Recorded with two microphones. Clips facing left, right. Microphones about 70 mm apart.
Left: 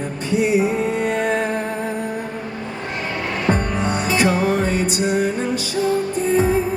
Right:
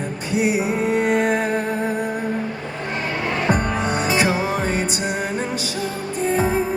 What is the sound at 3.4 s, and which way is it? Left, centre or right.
Music, right.